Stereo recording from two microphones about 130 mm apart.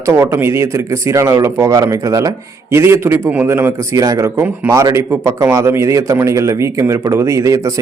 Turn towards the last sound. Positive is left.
turn(degrees=-25)  # may be behind; listen again after turning